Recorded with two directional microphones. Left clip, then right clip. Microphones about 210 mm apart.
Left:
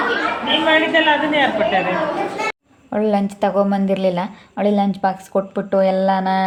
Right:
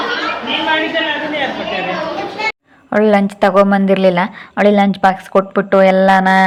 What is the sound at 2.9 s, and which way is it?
A woman's voice, 15° right (ahead or behind).